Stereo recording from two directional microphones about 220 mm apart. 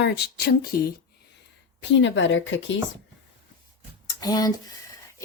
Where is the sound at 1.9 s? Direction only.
55° left (ahead or behind).